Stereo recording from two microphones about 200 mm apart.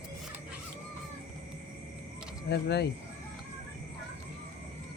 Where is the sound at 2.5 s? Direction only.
55° left (ahead or behind).